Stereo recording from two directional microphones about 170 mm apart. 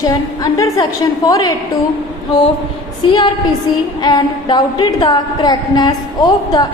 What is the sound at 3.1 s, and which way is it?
A woman's voice, 25° left (ahead or behind).